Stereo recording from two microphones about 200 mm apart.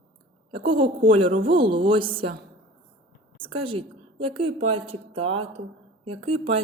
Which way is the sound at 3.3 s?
25° right (ahead or behind).